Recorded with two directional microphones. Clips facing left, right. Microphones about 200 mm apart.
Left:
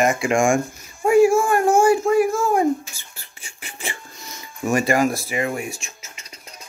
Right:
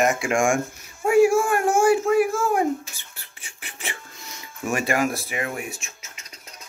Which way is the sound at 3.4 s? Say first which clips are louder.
Left 3 dB; centre (ahead or behind).